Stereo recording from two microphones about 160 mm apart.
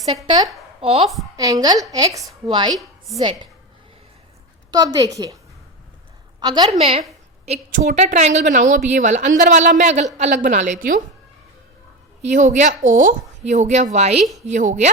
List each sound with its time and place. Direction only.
0.3 s a woman's voice: 30° right (ahead or behind)
1.0 s a woman's voice: centre (ahead or behind)
1.4 s a woman's voice: 25° right (ahead or behind)
4.7 s a woman's voice: 25° right (ahead or behind)
6.4 s a woman's voice: 25° right (ahead or behind)
6.7 s a woman's voice: 40° right (ahead or behind); by 11.0 s 55° right (ahead or behind)
12.2 s a woman's voice: 50° right (ahead or behind)